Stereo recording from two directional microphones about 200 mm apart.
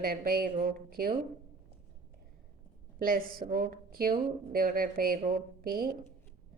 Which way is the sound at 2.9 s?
45° right (ahead or behind).